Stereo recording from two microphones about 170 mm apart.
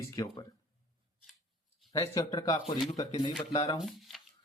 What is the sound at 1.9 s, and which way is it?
Speech, 20° left (ahead or behind).